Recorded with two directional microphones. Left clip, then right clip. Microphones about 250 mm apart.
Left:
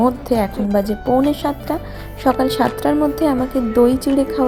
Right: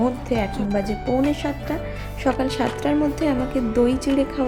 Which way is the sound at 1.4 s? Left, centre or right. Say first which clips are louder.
Left 5 dB; centre.